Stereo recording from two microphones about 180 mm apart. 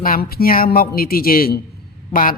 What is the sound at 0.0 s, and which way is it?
A man's voice, 55° left (ahead or behind).